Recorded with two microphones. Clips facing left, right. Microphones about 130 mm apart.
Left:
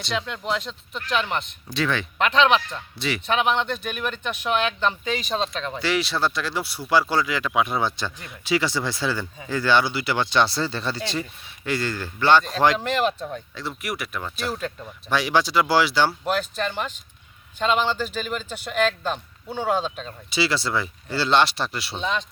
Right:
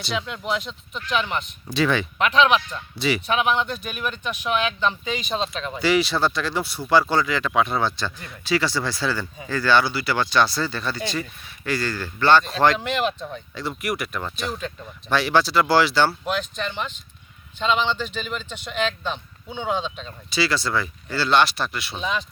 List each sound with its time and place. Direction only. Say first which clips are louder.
0.0 s speech: even; 5° right (ahead or behind); by 12.8 s 10° left (ahead or behind)
13.5 s speech: right 3 dB; centre (ahead or behind)
17.8 s speech: left 1 dB; 5° left (ahead or behind)
20.3 s speech: right 1 dB; 25° left (ahead or behind)
21.9 s speech: left 1 dB; 5° right (ahead or behind)